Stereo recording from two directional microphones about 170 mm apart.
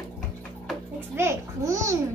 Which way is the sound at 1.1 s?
15° right (ahead or behind).